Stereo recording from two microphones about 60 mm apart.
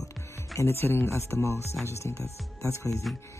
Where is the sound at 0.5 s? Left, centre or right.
Left.